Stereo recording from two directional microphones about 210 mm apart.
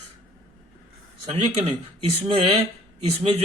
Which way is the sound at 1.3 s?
30° right (ahead or behind).